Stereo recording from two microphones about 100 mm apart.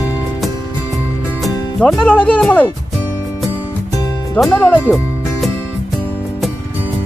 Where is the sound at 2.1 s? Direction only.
15° left (ahead or behind).